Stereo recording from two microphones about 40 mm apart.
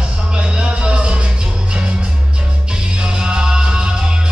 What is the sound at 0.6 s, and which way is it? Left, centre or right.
Music, right.